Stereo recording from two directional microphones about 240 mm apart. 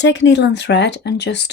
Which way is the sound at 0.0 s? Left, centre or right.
Left.